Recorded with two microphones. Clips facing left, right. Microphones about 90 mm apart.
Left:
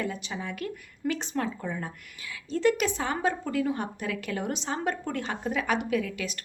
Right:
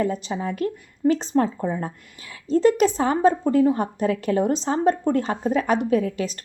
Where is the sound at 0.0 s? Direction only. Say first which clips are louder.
Right 9 dB; 35° right (ahead or behind).